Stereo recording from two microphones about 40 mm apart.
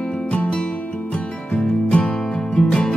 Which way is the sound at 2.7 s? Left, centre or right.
Left.